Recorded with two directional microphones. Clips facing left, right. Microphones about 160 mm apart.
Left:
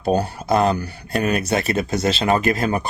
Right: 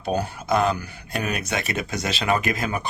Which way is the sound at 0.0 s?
35° left (ahead or behind).